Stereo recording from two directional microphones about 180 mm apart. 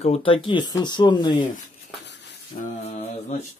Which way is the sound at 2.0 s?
75° left (ahead or behind).